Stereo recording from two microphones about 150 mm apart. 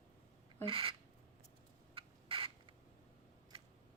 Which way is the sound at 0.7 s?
35° right (ahead or behind).